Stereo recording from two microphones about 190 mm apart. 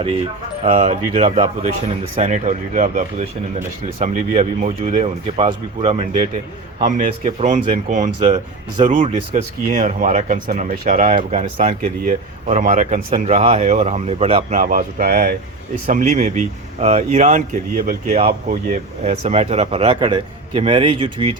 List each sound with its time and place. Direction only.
0.6 s speech: 35° right (ahead or behind)
7.3 s speech: 35° right (ahead or behind)
14.6 s speech: 45° right (ahead or behind)
15.9 s speech: 40° right (ahead or behind)
19.0 s speech: 35° right (ahead or behind)